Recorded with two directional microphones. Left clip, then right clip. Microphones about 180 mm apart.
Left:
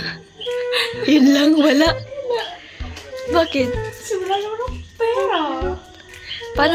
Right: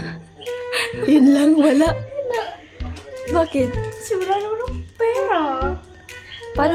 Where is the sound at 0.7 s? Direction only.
10° right (ahead or behind).